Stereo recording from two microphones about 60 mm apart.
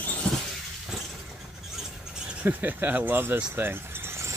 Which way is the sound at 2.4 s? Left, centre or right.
Right.